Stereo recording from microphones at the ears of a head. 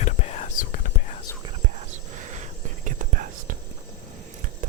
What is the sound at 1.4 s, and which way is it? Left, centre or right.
Whispering, right.